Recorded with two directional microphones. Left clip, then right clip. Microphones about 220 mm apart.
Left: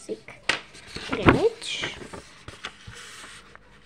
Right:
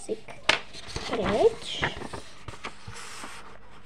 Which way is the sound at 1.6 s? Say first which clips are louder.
Even; 25° left (ahead or behind).